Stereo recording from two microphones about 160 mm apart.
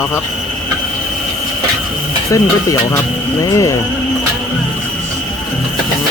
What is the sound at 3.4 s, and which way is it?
Speech, 20° left (ahead or behind).